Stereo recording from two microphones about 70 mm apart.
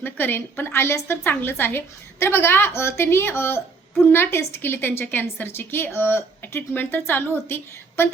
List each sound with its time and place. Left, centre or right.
0.0 s a woman's voice: left